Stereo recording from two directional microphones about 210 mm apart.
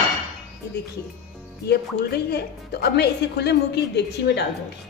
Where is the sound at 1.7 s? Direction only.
50° left (ahead or behind).